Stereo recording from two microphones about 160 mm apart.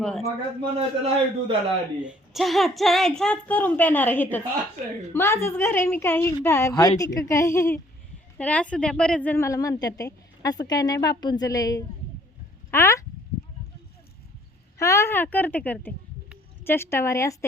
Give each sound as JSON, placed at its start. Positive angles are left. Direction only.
{"t": 0.2, "sound": "a man's voice", "side_deg": -40}
{"t": 2.0, "sound": "a woman's voice", "side_deg": -5}
{"t": 14.8, "sound": "a woman's voice", "side_deg": 15}